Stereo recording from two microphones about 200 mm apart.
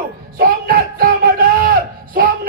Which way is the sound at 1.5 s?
45° right (ahead or behind).